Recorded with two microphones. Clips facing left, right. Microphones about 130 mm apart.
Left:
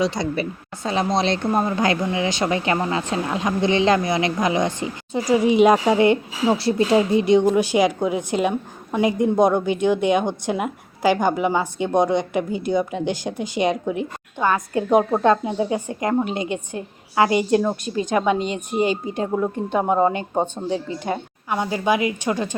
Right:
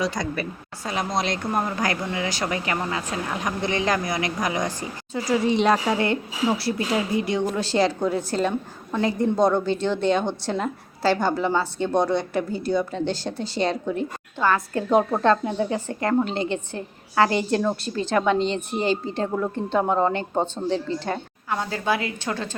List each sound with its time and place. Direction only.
0.0 s a woman's voice: 25° left (ahead or behind)